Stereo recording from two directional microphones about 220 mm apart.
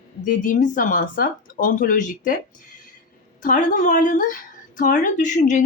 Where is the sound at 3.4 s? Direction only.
35° left (ahead or behind).